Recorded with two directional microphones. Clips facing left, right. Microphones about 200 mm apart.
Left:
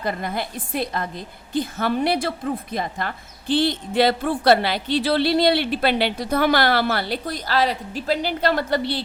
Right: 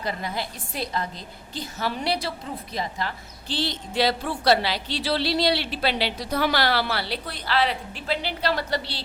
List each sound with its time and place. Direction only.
0.0 s a woman's voice: 55° left (ahead or behind)